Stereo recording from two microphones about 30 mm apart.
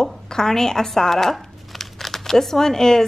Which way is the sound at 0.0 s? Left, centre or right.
Centre.